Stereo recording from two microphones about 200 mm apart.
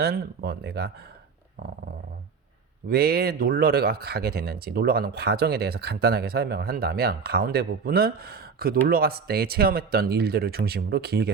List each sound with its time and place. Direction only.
0.0 s speech: 50° right (ahead or behind)
2.9 s speech: 50° right (ahead or behind)